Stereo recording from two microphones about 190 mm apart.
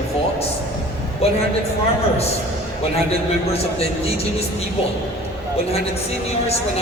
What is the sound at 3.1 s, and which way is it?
A woman's voice, 30° left (ahead or behind).